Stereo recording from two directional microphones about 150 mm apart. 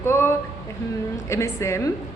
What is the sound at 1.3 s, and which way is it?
Speech, 20° left (ahead or behind).